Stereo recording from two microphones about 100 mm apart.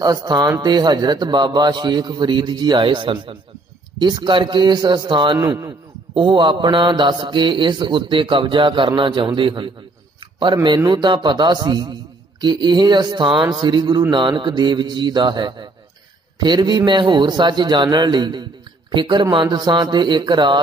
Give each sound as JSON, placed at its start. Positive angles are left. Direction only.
{"t": 0.0, "sound": "a man's voice", "side_deg": -40}